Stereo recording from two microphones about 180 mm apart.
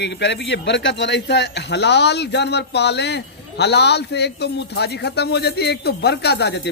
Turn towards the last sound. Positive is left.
turn(degrees=70)  # may be behind; listen again after turning